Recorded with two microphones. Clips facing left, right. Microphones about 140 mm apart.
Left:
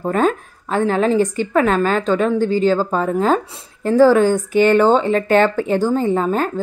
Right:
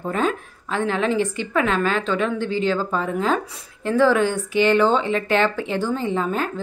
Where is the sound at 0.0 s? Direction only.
45° left (ahead or behind).